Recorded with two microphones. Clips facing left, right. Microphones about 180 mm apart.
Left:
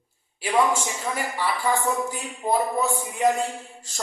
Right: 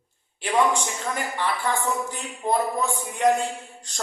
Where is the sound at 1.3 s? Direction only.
10° left (ahead or behind).